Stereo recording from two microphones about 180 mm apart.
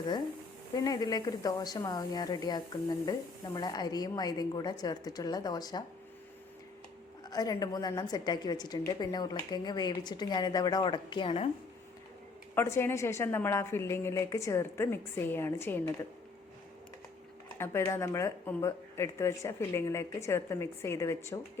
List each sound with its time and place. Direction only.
0.8 s a woman's voice: 20° left (ahead or behind)
7.3 s a woman's voice: 20° left (ahead or behind)
12.5 s speech: 15° left (ahead or behind)
17.6 s speech: 15° left (ahead or behind)